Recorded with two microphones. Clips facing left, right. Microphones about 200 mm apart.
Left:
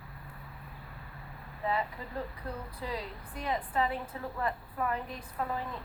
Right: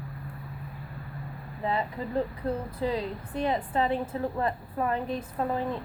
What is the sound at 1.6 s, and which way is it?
A woman's voice, 25° right (ahead or behind).